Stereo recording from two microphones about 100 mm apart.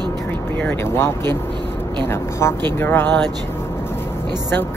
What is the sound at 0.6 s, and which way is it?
Speech, 25° left (ahead or behind).